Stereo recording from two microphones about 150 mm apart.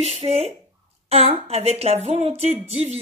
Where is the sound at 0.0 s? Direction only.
45° right (ahead or behind).